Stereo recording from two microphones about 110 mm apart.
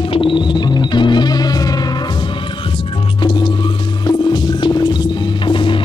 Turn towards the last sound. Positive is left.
turn(degrees=50)  # may be behind; listen again after turning